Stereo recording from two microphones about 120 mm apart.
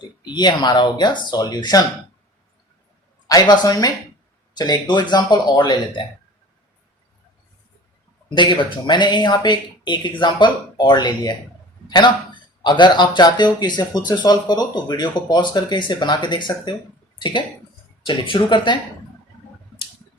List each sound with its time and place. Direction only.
0.3 s speech: 35° left (ahead or behind)
3.2 s speech: 35° left (ahead or behind)
8.4 s speech: 40° left (ahead or behind)